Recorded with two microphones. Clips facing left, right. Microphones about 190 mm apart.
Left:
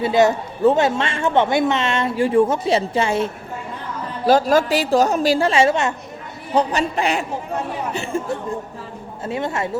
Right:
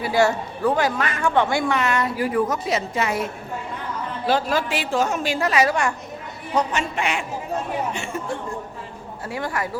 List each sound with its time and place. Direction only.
0.0 s a man's voice: 20° left (ahead or behind)
4.3 s a woman's voice: 40° left (ahead or behind)
9.2 s a man's voice: 25° left (ahead or behind)